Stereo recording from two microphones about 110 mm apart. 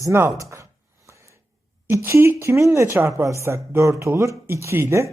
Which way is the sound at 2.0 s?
25° right (ahead or behind).